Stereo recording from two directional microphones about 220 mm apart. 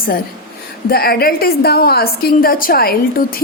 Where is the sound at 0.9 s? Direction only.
45° left (ahead or behind).